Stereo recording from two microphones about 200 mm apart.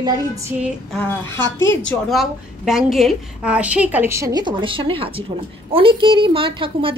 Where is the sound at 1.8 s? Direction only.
Centre (ahead or behind).